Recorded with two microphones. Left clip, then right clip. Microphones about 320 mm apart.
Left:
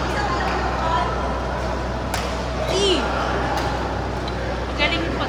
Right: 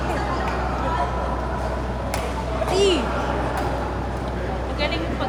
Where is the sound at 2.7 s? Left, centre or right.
Right.